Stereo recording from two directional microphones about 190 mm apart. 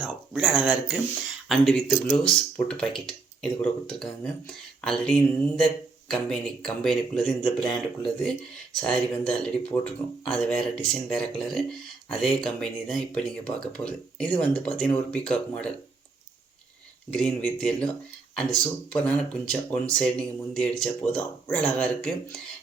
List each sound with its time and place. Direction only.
0.0 s speech: 5° right (ahead or behind)
17.1 s speech: 5° left (ahead or behind)